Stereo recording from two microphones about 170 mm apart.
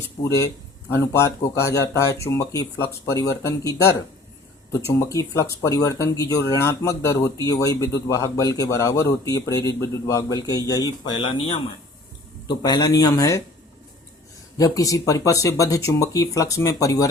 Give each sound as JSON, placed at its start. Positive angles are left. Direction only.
{"t": 0.3, "sound": "speech", "side_deg": 20}
{"t": 14.6, "sound": "speech", "side_deg": 20}